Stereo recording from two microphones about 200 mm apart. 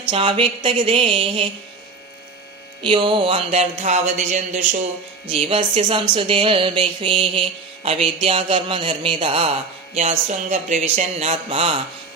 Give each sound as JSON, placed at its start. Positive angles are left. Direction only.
{"t": 0.1, "sound": "a man's voice", "side_deg": -25}
{"t": 2.8, "sound": "a man's voice", "side_deg": -25}